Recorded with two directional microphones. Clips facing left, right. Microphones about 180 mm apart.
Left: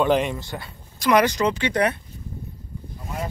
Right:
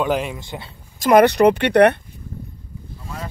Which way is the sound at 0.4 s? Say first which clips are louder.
Right 1 dB; 20° right (ahead or behind).